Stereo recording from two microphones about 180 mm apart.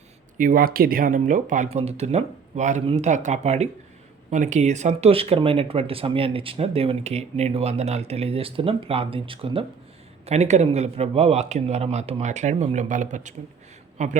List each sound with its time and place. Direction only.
0.3 s speech: 50° right (ahead or behind)